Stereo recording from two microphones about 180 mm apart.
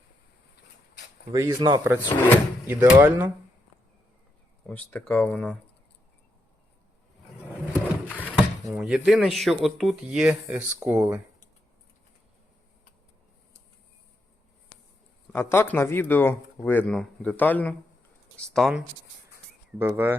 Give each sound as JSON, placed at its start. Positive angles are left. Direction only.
{"t": 1.3, "sound": "speech", "side_deg": -20}
{"t": 4.6, "sound": "speech", "side_deg": 10}
{"t": 7.5, "sound": "a sound", "side_deg": 10}
{"t": 8.4, "sound": "speech", "side_deg": -5}
{"t": 15.3, "sound": "speech", "side_deg": 10}
{"t": 19.8, "sound": "speech", "side_deg": -10}